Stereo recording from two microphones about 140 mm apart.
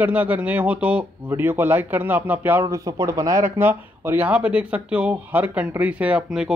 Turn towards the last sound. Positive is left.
turn(degrees=-5)  # may be behind; listen again after turning